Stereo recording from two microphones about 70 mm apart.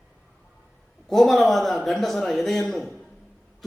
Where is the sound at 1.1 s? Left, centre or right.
Centre.